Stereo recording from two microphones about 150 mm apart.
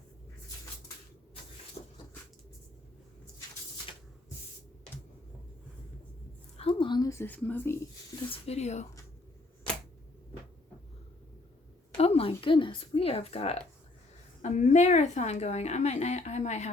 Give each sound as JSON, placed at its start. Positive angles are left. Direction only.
{"t": 1.8, "sound": "a sound", "side_deg": 45}
{"t": 6.6, "sound": "a woman's voice", "side_deg": 35}
{"t": 8.3, "sound": "a woman's voice", "side_deg": 45}
{"t": 11.9, "sound": "a woman's voice", "side_deg": 40}